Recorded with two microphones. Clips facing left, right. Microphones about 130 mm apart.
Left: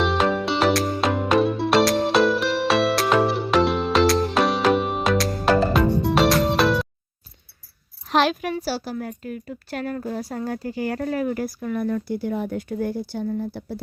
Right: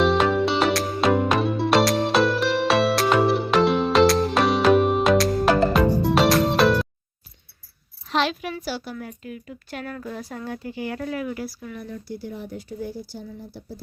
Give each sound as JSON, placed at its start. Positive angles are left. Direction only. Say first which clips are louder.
{"t": 0.0, "sound": "music", "louder": "right 2 dB", "side_deg": 0}
{"t": 8.0, "sound": "a sound", "louder": "left 4 dB", "side_deg": 50}
{"t": 8.5, "sound": "a woman's voice", "louder": "left 4 dB", "side_deg": 35}